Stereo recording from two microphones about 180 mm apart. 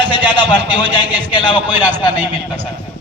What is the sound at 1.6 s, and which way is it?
A man's voice, 10° right (ahead or behind).